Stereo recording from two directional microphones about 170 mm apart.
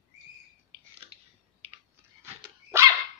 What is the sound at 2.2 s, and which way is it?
Dog, 15° right (ahead or behind).